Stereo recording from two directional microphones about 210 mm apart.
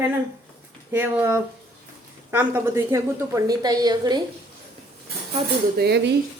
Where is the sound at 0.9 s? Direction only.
10° right (ahead or behind).